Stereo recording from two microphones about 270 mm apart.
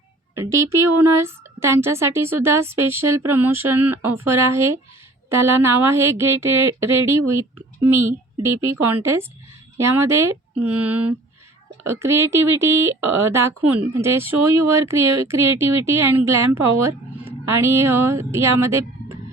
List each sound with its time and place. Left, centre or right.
0.3 s speech: centre